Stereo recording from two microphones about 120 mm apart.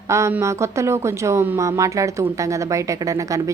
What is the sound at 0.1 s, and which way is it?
A woman's voice, 25° right (ahead or behind).